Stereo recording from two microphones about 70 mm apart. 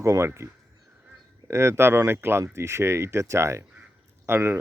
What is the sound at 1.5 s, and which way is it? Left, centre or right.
Speech, right.